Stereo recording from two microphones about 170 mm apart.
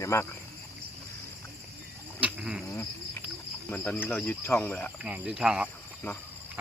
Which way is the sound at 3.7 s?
5° left (ahead or behind).